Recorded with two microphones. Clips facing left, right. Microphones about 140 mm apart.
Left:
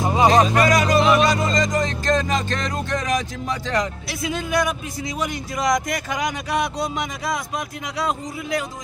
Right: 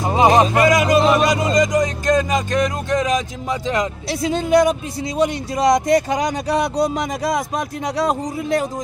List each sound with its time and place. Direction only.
0.0 s music: 20° right (ahead or behind)
4.1 s speech: 30° right (ahead or behind)